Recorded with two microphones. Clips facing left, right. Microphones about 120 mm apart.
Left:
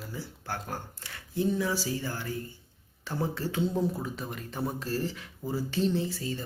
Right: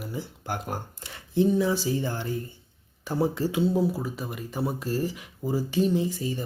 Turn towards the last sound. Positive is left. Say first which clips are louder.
# right 4 dB
turn(degrees=-15)  # may be behind; listen again after turning